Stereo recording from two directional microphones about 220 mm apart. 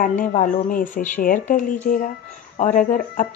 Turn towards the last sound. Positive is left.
turn(degrees=35)  # may be behind; listen again after turning